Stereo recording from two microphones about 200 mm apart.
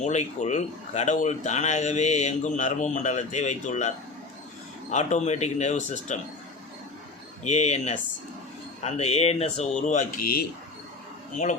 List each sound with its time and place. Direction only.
0.0 s speech: 35° left (ahead or behind)
7.5 s speech: 35° left (ahead or behind)